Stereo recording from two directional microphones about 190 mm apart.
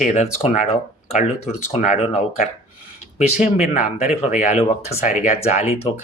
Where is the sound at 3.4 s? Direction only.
35° left (ahead or behind).